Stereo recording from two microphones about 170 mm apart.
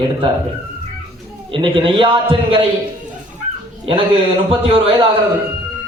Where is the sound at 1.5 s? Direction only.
30° right (ahead or behind).